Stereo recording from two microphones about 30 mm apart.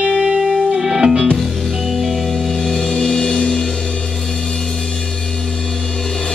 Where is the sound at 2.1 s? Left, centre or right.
Centre.